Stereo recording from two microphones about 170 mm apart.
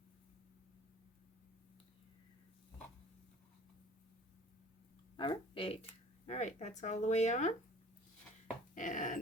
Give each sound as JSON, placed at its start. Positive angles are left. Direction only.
{"t": 5.1, "sound": "speech", "side_deg": 25}
{"t": 8.7, "sound": "dog", "side_deg": 50}